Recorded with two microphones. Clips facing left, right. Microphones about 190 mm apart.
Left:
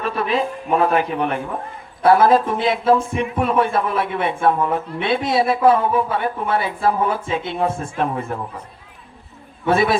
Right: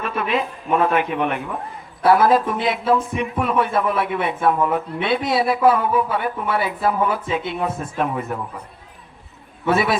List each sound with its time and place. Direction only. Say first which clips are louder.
0.0 s a man's voice: left 2 dB; 35° left (ahead or behind)
9.6 s speech: left 2 dB; 30° left (ahead or behind)